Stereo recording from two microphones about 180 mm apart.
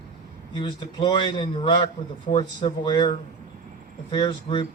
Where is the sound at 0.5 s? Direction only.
25° left (ahead or behind).